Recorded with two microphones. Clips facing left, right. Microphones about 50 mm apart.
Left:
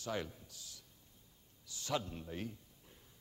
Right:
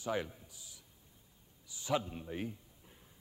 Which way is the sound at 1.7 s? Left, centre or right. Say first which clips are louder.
Right 4 dB; centre.